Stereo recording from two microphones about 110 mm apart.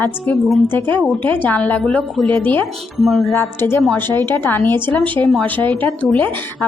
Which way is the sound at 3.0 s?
Centre (ahead or behind).